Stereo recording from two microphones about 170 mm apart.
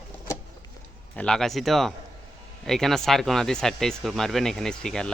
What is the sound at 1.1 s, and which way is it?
A man's voice, 5° left (ahead or behind).